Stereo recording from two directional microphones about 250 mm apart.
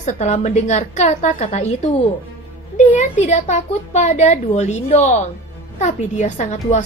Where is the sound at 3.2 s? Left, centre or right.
Left.